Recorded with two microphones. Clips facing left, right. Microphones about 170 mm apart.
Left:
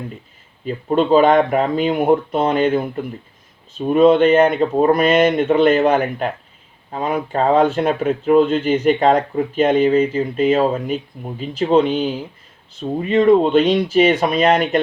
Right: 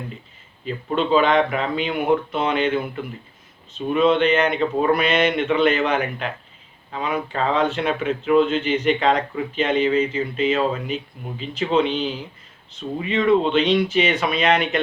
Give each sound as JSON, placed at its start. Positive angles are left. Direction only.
{"t": 0.9, "sound": "speech", "side_deg": 45}